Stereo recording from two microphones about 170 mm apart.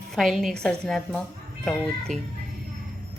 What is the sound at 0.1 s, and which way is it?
Speech, centre (ahead or behind).